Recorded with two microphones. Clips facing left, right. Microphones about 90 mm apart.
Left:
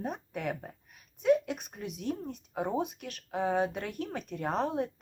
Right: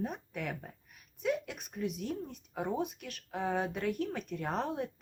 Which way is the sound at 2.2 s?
15° left (ahead or behind).